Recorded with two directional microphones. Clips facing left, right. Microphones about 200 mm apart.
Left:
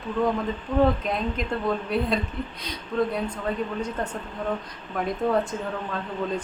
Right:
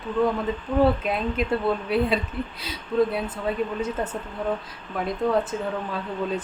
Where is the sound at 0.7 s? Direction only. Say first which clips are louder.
Right 1 dB; 10° right (ahead or behind).